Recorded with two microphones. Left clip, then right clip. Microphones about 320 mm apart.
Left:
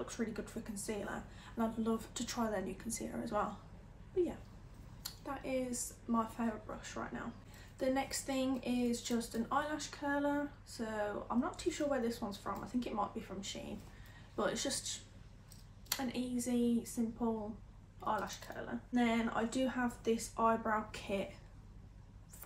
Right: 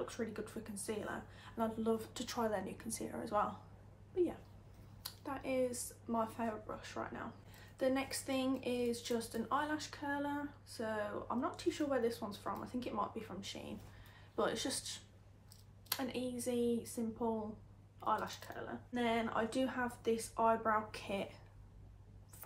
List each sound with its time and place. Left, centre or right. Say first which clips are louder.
0.0 s a woman's voice: even; centre
5.0 s a woman's voice: even; centre